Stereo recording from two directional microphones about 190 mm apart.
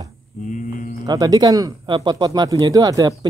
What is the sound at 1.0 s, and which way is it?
Speech, 20° right (ahead or behind).